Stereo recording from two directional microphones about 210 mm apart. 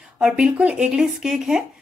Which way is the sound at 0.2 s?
5° right (ahead or behind).